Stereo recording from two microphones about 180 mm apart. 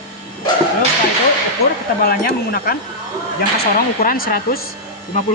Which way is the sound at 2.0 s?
60° left (ahead or behind).